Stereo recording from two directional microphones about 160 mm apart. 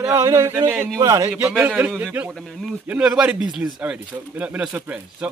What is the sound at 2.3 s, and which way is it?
Speech, centre (ahead or behind).